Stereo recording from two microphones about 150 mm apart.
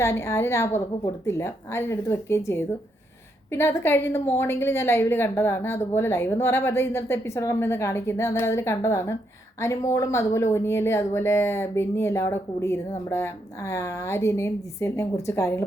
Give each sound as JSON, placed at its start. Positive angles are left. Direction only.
{"t": 0.0, "sound": "a woman's voice", "side_deg": 15}